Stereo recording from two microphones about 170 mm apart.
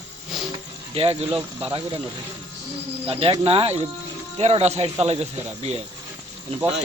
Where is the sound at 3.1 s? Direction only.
35° right (ahead or behind).